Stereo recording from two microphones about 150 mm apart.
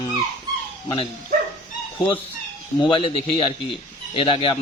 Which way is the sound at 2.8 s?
35° left (ahead or behind).